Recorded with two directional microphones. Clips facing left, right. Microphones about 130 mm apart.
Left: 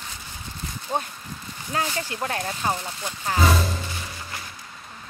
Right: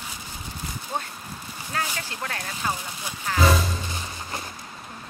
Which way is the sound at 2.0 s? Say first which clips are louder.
Left 5 dB; 20° left (ahead or behind).